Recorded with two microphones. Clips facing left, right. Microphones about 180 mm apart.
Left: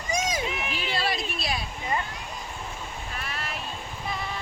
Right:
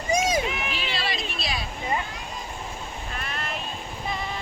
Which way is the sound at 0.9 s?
55° left (ahead or behind).